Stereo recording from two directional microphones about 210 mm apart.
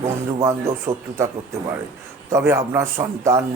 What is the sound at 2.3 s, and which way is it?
A man's voice, 10° right (ahead or behind).